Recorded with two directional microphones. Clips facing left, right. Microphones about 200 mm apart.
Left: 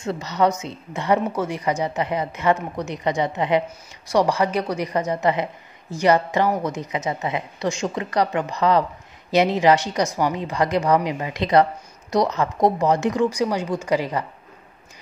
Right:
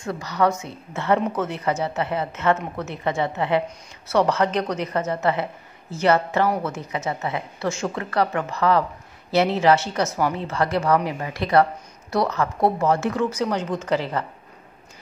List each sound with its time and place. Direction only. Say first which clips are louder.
0.0 s a woman's voice: left 1 dB; 20° left (ahead or behind)